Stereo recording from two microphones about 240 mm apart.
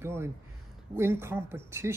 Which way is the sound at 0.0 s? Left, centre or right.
Centre.